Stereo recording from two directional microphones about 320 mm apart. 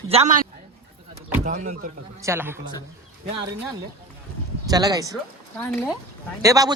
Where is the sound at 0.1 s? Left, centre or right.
Right.